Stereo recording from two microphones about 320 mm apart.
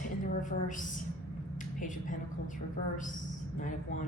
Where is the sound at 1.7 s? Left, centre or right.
Left.